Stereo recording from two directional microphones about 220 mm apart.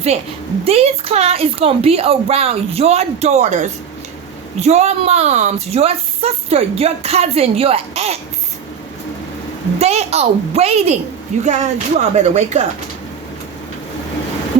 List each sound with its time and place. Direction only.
0.1 s speech: 25° right (ahead or behind)
9.7 s speech: 30° right (ahead or behind)